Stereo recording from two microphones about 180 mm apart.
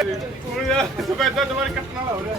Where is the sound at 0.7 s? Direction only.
Centre (ahead or behind).